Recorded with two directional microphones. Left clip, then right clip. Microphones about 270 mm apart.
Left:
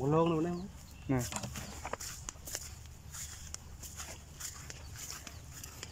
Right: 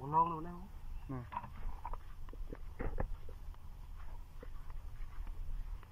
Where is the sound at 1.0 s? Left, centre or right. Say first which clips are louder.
Left 8 dB; left.